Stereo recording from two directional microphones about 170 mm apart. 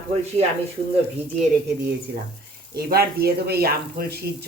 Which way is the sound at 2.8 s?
65° right (ahead or behind).